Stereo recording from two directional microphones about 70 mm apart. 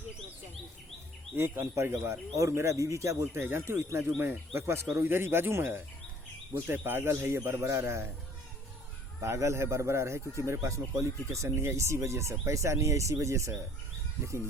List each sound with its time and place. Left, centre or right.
1.4 s speech: right
9.2 s speech: right